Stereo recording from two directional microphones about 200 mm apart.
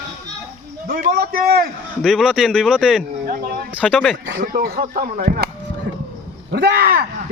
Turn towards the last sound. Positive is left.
turn(degrees=-50)  # may be behind; listen again after turning